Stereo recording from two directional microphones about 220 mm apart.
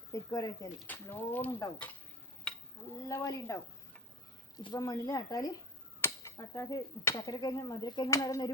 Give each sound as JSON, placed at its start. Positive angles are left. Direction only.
{"t": 0.1, "sound": "speech", "side_deg": 15}
{"t": 3.1, "sound": "speech", "side_deg": 15}